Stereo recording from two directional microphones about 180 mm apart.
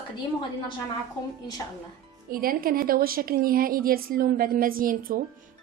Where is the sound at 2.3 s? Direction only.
55° right (ahead or behind).